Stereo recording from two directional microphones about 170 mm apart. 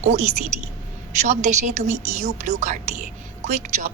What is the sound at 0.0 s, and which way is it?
A woman's voice, 45° right (ahead or behind).